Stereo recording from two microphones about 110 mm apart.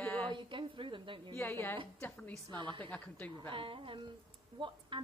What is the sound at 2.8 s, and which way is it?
Mantra, 15° left (ahead or behind).